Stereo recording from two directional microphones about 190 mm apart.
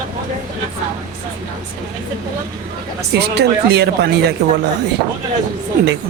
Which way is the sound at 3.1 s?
60° right (ahead or behind).